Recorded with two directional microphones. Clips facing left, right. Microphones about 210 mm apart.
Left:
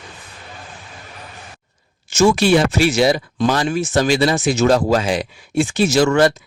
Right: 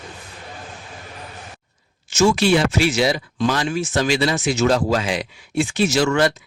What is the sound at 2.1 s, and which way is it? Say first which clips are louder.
Speech: left 2 dB; 55° left (ahead or behind).